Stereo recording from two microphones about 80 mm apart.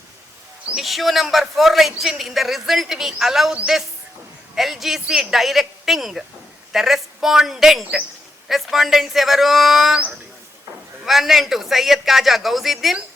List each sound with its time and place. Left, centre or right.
0.8 s a man's voice: centre
4.5 s a man's voice: centre
11.0 s a man's voice: centre